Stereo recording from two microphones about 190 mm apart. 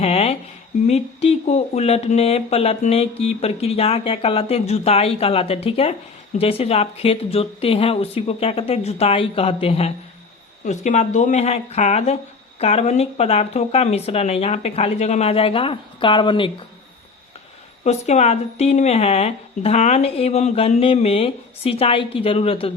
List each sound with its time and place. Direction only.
0.0 s a sound: 30° left (ahead or behind)
0.9 s speech: 30° left (ahead or behind)
17.8 s speech: 35° left (ahead or behind)